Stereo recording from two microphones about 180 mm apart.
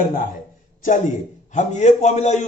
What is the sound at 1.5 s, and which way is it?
Speech, 40° left (ahead or behind).